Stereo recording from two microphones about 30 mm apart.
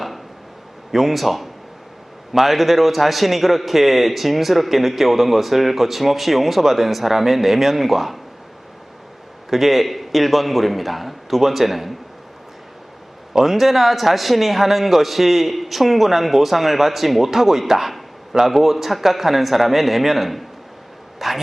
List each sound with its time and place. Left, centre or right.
0.9 s a man's voice: centre
9.5 s a man's voice: centre
13.3 s a man's voice: centre